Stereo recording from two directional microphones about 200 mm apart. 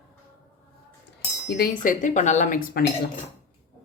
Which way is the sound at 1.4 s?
55° left (ahead or behind).